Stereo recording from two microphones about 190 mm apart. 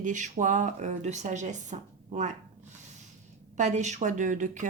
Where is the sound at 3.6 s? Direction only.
40° right (ahead or behind).